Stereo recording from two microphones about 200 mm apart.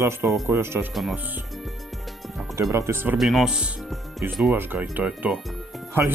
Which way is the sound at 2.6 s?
15° right (ahead or behind).